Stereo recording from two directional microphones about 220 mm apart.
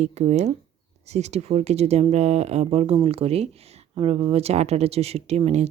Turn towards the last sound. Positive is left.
turn(degrees=-30)  # may be behind; listen again after turning